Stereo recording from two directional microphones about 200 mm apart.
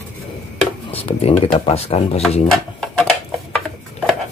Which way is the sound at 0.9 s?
30° left (ahead or behind).